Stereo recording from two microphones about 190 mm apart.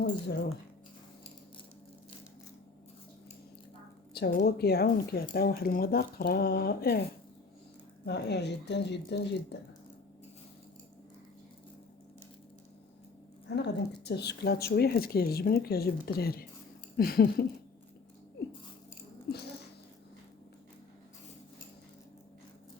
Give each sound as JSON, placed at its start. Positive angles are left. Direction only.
{"t": 0.0, "sound": "speech", "side_deg": 60}
{"t": 4.1, "sound": "speech", "side_deg": 60}
{"t": 8.0, "sound": "speech", "side_deg": 65}
{"t": 13.5, "sound": "speech", "side_deg": 65}
{"t": 17.0, "sound": "a sound", "side_deg": 55}